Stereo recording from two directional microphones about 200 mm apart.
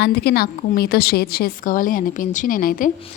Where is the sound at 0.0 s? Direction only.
55° left (ahead or behind).